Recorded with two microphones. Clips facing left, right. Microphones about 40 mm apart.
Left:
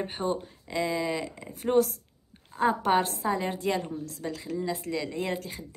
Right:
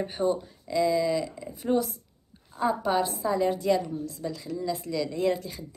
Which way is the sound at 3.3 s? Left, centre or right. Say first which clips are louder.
Right 5 dB; left.